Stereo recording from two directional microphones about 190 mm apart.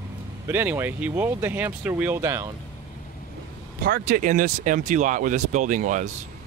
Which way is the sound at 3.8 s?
50° right (ahead or behind).